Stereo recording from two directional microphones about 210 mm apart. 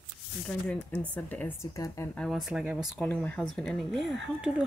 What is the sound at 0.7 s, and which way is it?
Speech, 5° left (ahead or behind).